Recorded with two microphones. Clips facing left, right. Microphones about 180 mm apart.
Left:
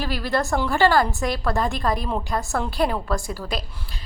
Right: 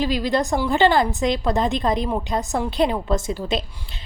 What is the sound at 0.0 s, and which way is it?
A woman's voice, 20° right (ahead or behind).